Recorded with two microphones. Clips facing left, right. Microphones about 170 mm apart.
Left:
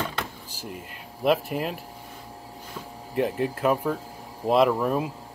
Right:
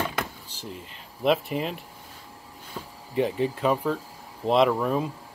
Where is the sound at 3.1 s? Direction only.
Centre (ahead or behind).